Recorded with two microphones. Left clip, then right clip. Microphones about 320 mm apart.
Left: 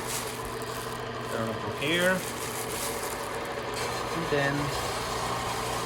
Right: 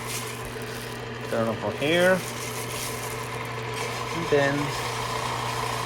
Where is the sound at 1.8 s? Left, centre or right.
Centre.